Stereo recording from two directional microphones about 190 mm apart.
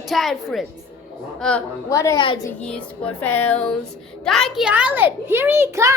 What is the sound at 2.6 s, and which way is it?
Music, 5° left (ahead or behind).